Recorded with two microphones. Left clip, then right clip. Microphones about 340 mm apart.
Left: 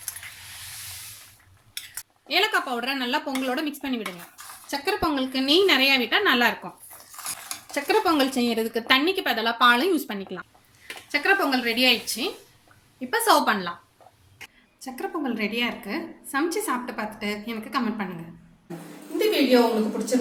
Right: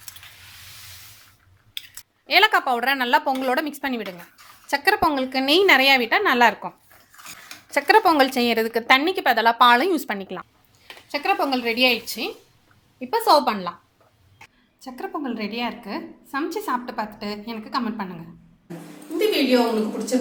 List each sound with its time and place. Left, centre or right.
2.2 s a woman's voice: right
7.7 s a woman's voice: centre
14.8 s a woman's voice: centre
19.3 s a woman's voice: centre